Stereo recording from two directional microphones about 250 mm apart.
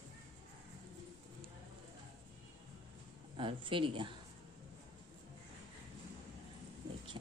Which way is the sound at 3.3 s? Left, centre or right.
Centre.